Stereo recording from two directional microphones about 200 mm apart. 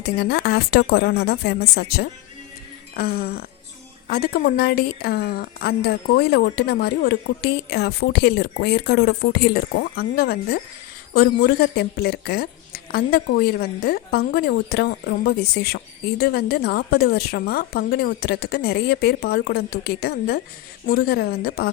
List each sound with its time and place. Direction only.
0.0 s a woman's voice: 55° left (ahead or behind)